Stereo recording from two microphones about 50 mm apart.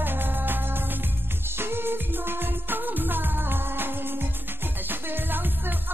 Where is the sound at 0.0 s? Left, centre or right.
Right.